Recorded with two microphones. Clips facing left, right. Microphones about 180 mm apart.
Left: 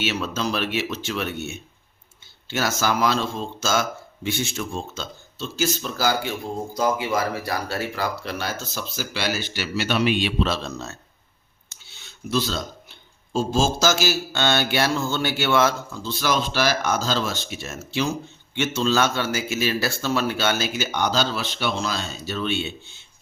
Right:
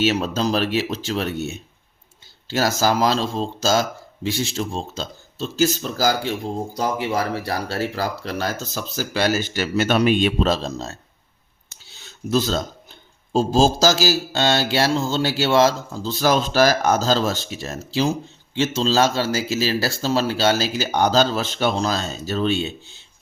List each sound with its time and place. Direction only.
0.0 s speech: 35° right (ahead or behind)